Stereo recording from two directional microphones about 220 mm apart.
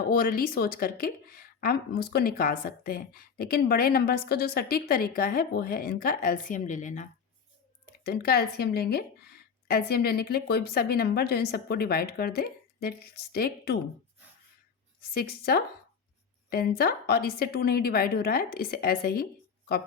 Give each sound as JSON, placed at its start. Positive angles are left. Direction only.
{"t": 0.1, "sound": "speech", "side_deg": 40}
{"t": 8.0, "sound": "speech", "side_deg": 45}
{"t": 15.1, "sound": "speech", "side_deg": 45}